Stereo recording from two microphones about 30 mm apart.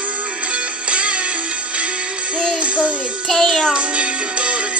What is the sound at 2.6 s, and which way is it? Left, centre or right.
Music, right.